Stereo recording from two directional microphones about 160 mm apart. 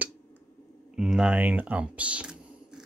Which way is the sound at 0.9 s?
5° right (ahead or behind).